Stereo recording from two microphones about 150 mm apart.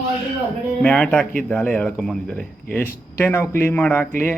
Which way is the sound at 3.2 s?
15° left (ahead or behind).